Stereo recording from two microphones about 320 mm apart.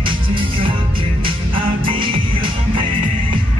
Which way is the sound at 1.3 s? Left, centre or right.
Centre.